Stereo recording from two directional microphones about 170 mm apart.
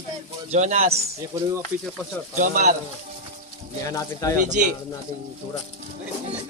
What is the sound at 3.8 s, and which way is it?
Speech, 20° left (ahead or behind).